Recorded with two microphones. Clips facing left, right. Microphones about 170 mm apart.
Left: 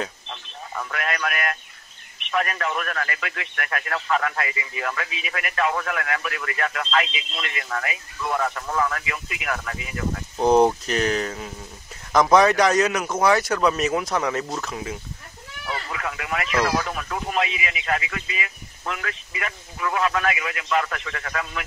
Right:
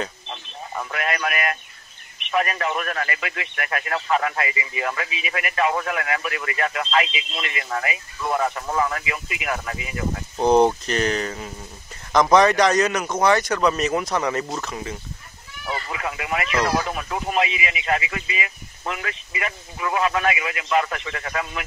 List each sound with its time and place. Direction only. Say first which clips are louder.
0.7 s a man's voice: right 2 dB; 15° right (ahead or behind)
10.4 s speech: even; 5° left (ahead or behind)
15.7 s a sound: right 2 dB; 15° right (ahead or behind)
16.6 s a man's voice: right 1 dB; 15° right (ahead or behind)